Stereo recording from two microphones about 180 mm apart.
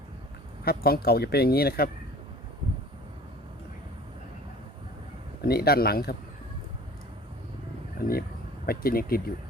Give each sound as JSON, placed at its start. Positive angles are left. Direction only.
{"t": 0.6, "sound": "speech", "side_deg": 60}
{"t": 5.4, "sound": "speech", "side_deg": 60}
{"t": 8.6, "sound": "speech", "side_deg": 55}